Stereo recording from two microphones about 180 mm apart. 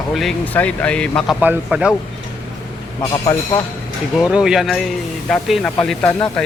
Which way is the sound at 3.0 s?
25° left (ahead or behind).